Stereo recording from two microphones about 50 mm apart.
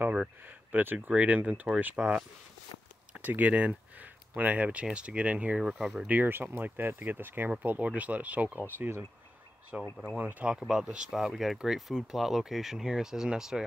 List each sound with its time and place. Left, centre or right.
0.5 s speech: right
2.0 s speech: centre
3.1 s a sound: right
4.4 s speech: right
5.6 s speech: centre
6.2 s speech: right
7.8 s speech: right
9.7 s speech: right
10.7 s speech: centre